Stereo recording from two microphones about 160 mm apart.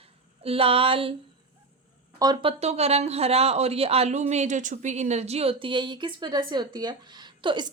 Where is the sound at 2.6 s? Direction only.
40° right (ahead or behind).